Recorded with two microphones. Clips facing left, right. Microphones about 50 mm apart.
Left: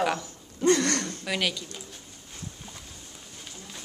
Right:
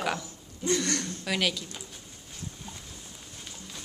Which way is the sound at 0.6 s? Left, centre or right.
Left.